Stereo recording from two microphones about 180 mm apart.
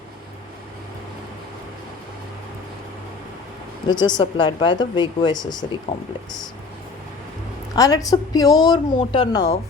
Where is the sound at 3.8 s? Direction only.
25° left (ahead or behind).